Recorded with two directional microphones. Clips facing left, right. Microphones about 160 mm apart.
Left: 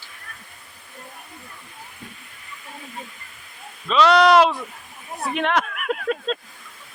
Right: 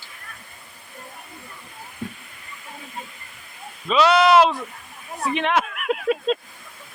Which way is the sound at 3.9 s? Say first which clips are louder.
Left 1 dB; 5° right (ahead or behind).